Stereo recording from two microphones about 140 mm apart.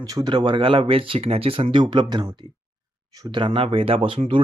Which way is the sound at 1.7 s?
30° right (ahead or behind).